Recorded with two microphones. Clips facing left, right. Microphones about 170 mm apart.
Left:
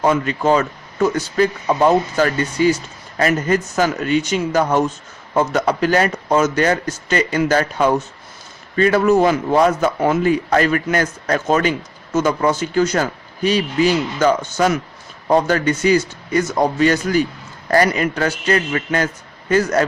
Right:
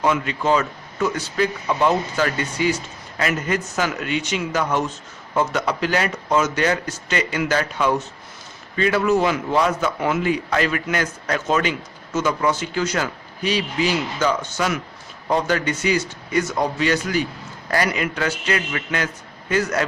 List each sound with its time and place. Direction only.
0.0 s a man's voice: 45° left (ahead or behind)